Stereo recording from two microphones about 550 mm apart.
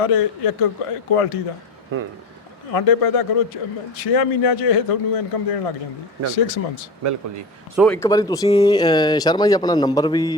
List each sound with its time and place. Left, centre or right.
0.0 s a man's voice: left
2.7 s a man's voice: left
6.3 s speech: left
7.0 s speech: right
7.8 s speech: centre